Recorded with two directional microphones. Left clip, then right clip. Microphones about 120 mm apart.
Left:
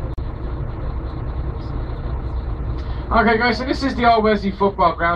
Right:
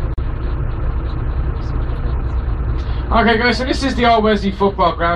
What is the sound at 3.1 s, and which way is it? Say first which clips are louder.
Speech: right 2 dB; 15° right (ahead or behind).